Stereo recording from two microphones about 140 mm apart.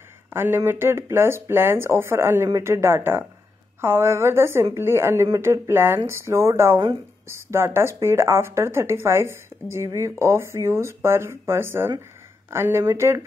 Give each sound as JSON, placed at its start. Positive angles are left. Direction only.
{"t": 0.3, "sound": "speech", "side_deg": -15}